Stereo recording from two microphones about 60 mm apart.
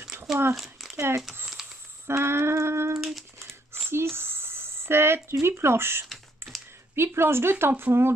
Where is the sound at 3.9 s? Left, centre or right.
Right.